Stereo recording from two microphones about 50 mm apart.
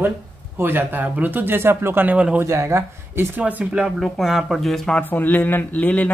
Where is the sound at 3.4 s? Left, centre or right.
Right.